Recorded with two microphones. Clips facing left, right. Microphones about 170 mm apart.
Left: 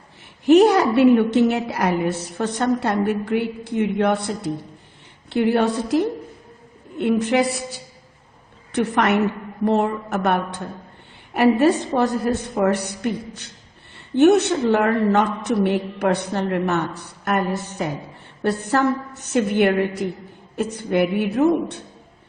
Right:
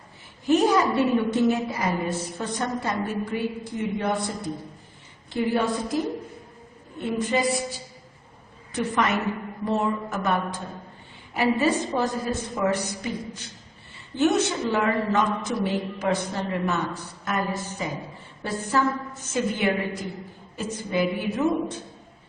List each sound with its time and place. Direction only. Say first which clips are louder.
0.4 s a woman's voice: left 7 dB; 70° left (ahead or behind)
7.0 s a woman's voice: left 6 dB; 70° left (ahead or behind)